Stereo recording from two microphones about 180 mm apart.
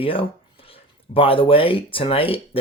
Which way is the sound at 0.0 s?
30° left (ahead or behind).